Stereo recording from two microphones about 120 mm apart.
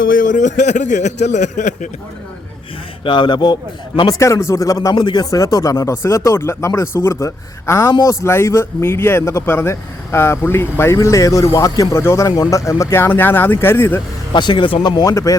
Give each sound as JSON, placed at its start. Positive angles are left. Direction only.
{"t": 0.3, "sound": "speech", "side_deg": 90}
{"t": 3.0, "sound": "a man's voice", "side_deg": 40}
{"t": 14.3, "sound": "speech", "side_deg": 40}